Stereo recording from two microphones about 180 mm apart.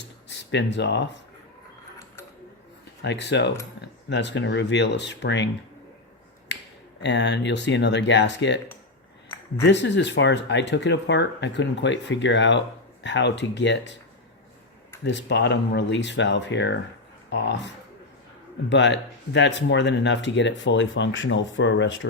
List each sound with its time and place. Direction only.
0.0 s a sound: 75° left (ahead or behind)
3.0 s speech: 70° left (ahead or behind)
7.0 s speech: 75° left (ahead or behind)
9.6 s speech: 75° left (ahead or behind)
15.0 s speech: 75° left (ahead or behind)